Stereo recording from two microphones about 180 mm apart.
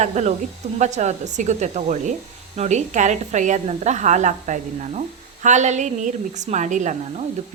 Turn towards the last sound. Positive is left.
turn(degrees=-40)  # may be behind; listen again after turning